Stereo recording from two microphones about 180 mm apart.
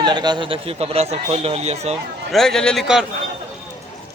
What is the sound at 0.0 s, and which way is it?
Speech, 25° right (ahead or behind).